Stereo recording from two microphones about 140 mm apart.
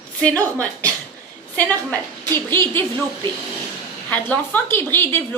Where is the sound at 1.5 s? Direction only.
10° left (ahead or behind).